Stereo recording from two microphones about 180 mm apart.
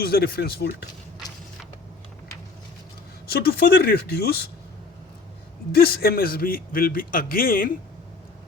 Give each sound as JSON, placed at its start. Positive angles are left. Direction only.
{"t": 0.0, "sound": "speech", "side_deg": 60}
{"t": 3.2, "sound": "speech", "side_deg": 60}
{"t": 5.7, "sound": "a man's voice", "side_deg": 60}